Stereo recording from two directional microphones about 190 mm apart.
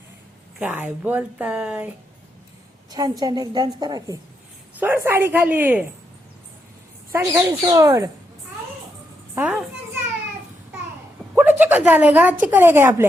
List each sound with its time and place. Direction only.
0.6 s speech: 5° right (ahead or behind)
2.9 s a woman's voice: 20° right (ahead or behind)
7.1 s speech: 15° right (ahead or behind)
9.3 s a sound: 5° right (ahead or behind)
11.3 s a sound: 10° right (ahead or behind)
12.4 s speech: 10° right (ahead or behind)